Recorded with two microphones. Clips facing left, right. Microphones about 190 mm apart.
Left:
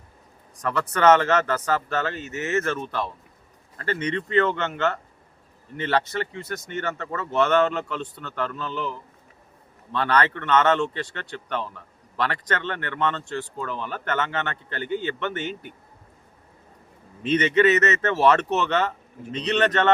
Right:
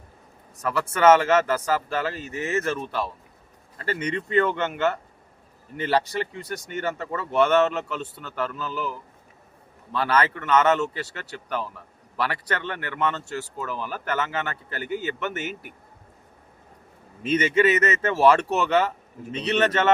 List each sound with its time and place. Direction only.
0.6 s speech: 5° right (ahead or behind)
2.3 s speech: 30° right (ahead or behind)
2.6 s a man's voice: 10° right (ahead or behind)
17.2 s speech: 5° right (ahead or behind)